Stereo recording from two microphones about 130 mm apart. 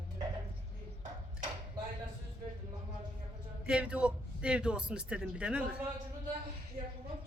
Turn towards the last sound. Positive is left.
turn(degrees=-10)  # may be behind; listen again after turning